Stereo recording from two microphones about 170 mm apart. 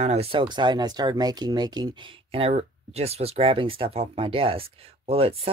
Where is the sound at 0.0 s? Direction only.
35° right (ahead or behind).